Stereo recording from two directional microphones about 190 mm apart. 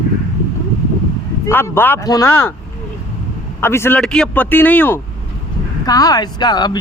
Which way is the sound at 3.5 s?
10° left (ahead or behind).